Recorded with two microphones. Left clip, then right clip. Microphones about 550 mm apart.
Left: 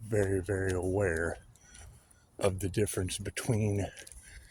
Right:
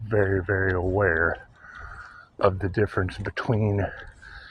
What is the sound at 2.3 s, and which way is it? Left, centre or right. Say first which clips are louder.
Speech: right 8 dB; left.